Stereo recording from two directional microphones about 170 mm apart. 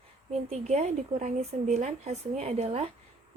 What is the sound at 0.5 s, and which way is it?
Speech, 40° right (ahead or behind).